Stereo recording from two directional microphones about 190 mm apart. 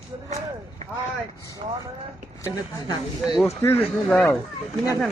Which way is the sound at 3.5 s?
10° left (ahead or behind).